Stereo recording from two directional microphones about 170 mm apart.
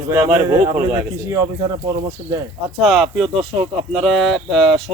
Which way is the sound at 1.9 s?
15° right (ahead or behind).